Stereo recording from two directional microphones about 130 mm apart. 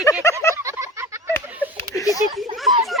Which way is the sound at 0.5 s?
25° right (ahead or behind).